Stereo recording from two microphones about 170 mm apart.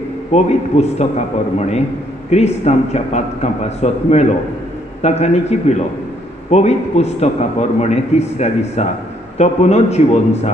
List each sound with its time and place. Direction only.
0.3 s a man's voice: 40° left (ahead or behind)